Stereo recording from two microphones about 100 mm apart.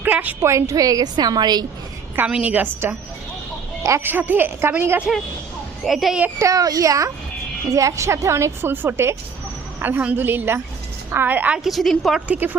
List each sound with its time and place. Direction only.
0.0 s a woman's voice: 15° right (ahead or behind); by 1.6 s 45° right (ahead or behind)
2.1 s a woman's voice: 10° right (ahead or behind)
5.8 s a woman's voice: centre (ahead or behind)
6.4 s a woman's voice: 35° right (ahead or behind); by 11.6 s 15° right (ahead or behind)
11.6 s a woman's voice: centre (ahead or behind)
12.4 s a woman's voice: 15° right (ahead or behind)